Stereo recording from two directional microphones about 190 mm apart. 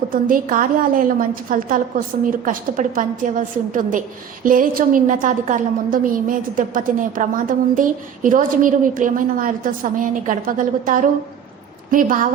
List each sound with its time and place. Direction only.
0.1 s a woman's voice: 45° right (ahead or behind)